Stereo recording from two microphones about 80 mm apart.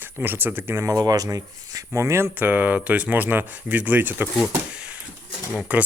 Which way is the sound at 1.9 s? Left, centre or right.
Right.